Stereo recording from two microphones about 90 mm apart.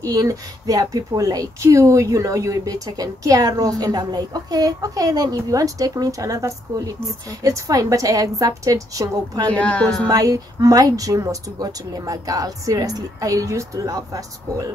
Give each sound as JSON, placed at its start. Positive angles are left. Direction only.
{"t": 0.0, "sound": "speech", "side_deg": -40}
{"t": 9.5, "sound": "speech", "side_deg": 15}
{"t": 10.0, "sound": "speech", "side_deg": -40}